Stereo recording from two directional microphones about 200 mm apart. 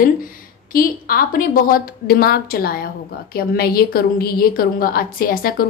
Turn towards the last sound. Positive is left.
turn(degrees=45)  # may be behind; listen again after turning